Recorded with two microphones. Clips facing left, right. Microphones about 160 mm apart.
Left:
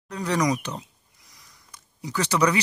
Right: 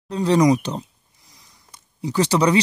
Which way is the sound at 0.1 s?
30° right (ahead or behind).